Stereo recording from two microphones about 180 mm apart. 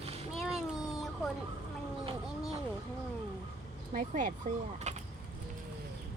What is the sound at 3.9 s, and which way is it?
Speech, 45° right (ahead or behind).